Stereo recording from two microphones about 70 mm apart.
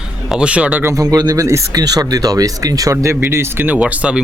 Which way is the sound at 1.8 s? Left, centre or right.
Right.